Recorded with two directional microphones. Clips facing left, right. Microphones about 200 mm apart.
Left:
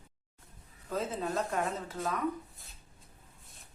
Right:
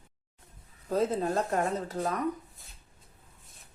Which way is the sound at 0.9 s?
40° right (ahead or behind).